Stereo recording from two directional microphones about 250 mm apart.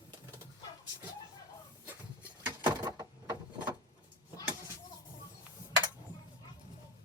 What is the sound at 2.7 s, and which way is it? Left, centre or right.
Door, centre.